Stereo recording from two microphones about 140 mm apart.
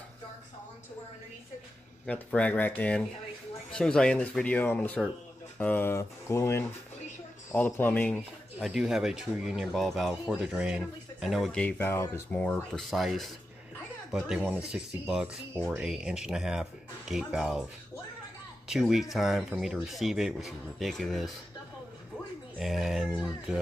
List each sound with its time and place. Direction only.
2.0 s speech: 10° left (ahead or behind)
8.5 s speech: 5° right (ahead or behind)
18.7 s speech: 5° right (ahead or behind)
22.6 s speech: centre (ahead or behind)